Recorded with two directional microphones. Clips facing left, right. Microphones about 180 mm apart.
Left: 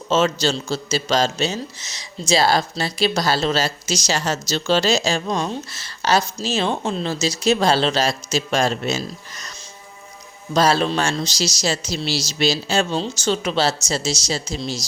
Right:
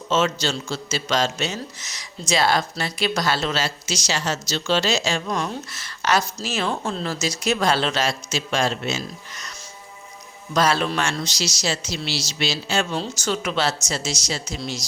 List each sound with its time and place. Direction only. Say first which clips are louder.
0.1 s a man's voice: left 3 dB; 35° left (ahead or behind)
10.5 s a man's voice: left 3 dB; 30° left (ahead or behind)